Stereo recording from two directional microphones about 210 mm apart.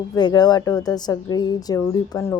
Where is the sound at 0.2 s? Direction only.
20° left (ahead or behind).